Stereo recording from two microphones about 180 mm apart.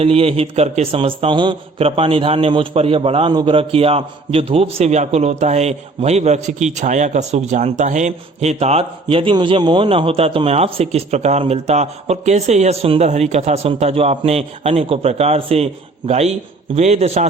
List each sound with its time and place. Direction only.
0.0 s a man's voice: 30° right (ahead or behind)